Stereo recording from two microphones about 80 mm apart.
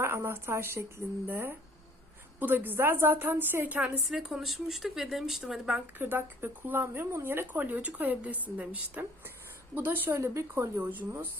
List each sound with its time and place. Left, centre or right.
0.0 s speech: right
4.1 s speech: centre
5.7 s speech: right
10.1 s speech: right